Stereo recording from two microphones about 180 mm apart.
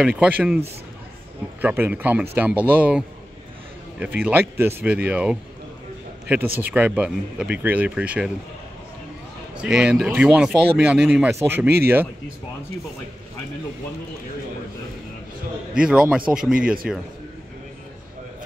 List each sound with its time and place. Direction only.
0.0 s speech: 5° right (ahead or behind)
1.6 s speech: 10° right (ahead or behind)
4.0 s speech: 10° right (ahead or behind)
9.6 s speech: 5° right (ahead or behind)
15.7 s speech: 5° right (ahead or behind)